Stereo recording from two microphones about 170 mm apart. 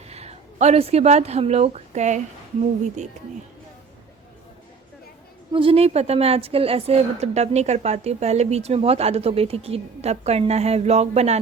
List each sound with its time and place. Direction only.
0.1 s a woman's voice: 40° right (ahead or behind)
5.5 s a woman's voice: 30° right (ahead or behind)